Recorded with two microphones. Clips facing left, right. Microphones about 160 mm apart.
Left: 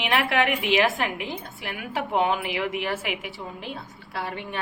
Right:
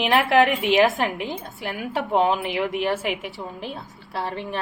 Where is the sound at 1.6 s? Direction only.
40° right (ahead or behind).